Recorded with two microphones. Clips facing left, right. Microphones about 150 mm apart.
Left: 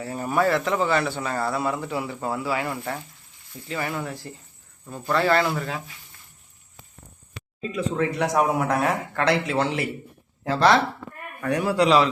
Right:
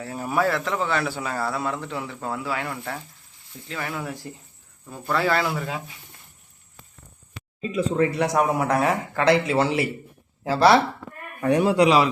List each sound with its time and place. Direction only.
0.0 s speech: centre (ahead or behind)
7.6 s speech: 5° right (ahead or behind)
11.3 s speech: 20° right (ahead or behind)
11.9 s speech: 10° right (ahead or behind)